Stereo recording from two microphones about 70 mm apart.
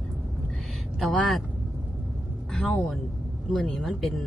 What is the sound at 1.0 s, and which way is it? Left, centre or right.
Speech, centre.